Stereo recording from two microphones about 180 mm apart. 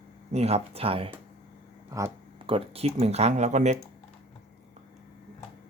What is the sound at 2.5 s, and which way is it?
Speech, 30° right (ahead or behind).